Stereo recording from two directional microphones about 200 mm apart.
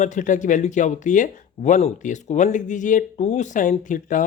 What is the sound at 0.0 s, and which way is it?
Speech, 40° left (ahead or behind).